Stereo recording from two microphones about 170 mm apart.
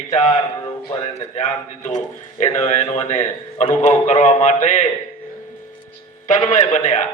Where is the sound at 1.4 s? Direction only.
45° left (ahead or behind).